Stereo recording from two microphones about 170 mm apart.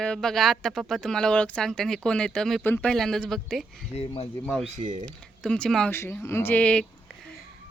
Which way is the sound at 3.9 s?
40° left (ahead or behind).